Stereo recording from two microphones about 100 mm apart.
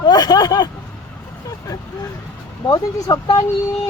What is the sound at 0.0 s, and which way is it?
Speech, 45° left (ahead or behind).